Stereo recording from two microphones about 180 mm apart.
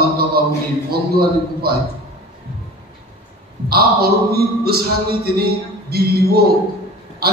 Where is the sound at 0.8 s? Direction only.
60° right (ahead or behind).